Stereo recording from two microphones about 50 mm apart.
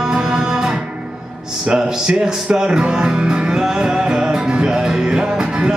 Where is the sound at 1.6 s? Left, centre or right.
Centre.